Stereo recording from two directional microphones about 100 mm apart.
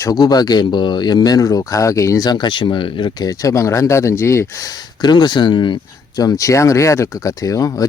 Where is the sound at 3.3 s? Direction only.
35° left (ahead or behind).